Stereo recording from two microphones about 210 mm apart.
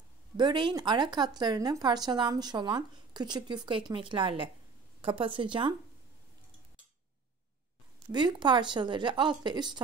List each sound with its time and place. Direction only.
0.4 s speech: 20° right (ahead or behind)
8.1 s speech: 20° right (ahead or behind)